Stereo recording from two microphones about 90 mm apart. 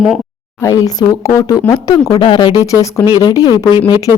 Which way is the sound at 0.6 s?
40° left (ahead or behind).